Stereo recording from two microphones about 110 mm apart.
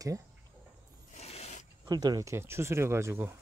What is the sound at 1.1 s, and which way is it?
Zipper, 85° left.